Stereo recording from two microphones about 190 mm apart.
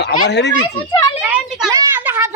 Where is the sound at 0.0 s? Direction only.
65° left (ahead or behind).